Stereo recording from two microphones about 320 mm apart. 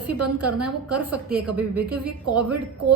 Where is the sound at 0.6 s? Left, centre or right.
Centre.